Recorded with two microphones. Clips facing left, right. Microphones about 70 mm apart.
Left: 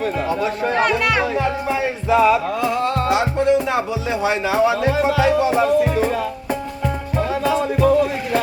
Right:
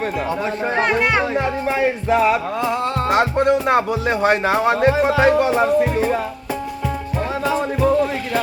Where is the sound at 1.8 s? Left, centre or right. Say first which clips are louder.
Even; right.